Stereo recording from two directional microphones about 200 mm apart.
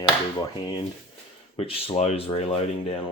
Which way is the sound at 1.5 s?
30° left (ahead or behind).